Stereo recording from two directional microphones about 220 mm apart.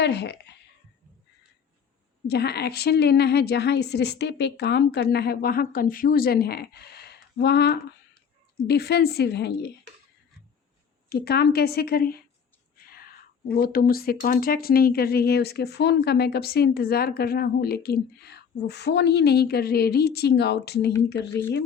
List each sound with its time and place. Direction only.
0.0 s speech: 50° left (ahead or behind)
2.2 s speech: 45° left (ahead or behind)
11.1 s speech: 45° left (ahead or behind)